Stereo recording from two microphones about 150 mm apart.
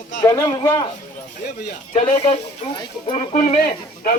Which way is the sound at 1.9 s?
50° left (ahead or behind).